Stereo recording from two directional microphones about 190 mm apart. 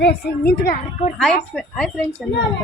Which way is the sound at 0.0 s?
55° left (ahead or behind).